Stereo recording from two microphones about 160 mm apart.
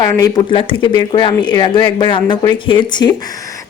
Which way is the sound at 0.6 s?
35° left (ahead or behind).